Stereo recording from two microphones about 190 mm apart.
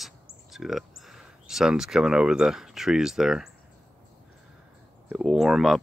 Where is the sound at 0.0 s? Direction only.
Centre (ahead or behind).